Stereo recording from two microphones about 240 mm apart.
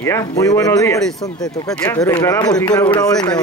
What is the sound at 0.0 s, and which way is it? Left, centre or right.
Speech, centre.